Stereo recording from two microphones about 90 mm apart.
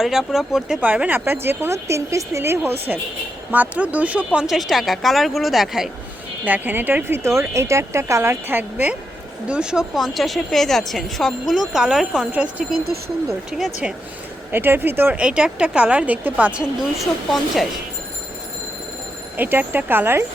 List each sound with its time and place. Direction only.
0.0 s a woman's voice: 5° right (ahead or behind)
0.8 s speech: 15° right (ahead or behind)
3.5 s speech: 15° right (ahead or behind)
4.4 s a woman's voice: centre (ahead or behind)
6.4 s speech: 20° right (ahead or behind)
9.5 s a woman's voice: 10° right (ahead or behind)
14.5 s speech: 25° right (ahead or behind)
17.0 s a woman's voice: centre (ahead or behind)
19.4 s speech: 20° right (ahead or behind)